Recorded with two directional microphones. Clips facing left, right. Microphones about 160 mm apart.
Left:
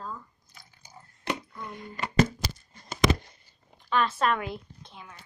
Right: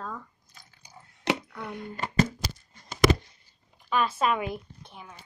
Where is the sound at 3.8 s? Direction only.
10° right (ahead or behind).